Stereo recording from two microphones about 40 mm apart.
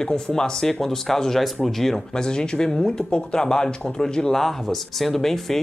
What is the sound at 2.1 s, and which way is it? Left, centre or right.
Speech, centre.